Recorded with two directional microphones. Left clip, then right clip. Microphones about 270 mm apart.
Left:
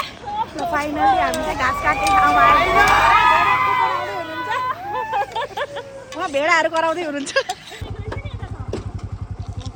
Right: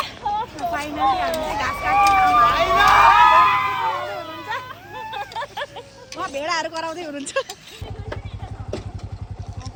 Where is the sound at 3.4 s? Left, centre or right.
Centre.